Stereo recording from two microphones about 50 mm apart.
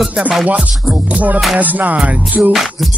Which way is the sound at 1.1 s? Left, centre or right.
Right.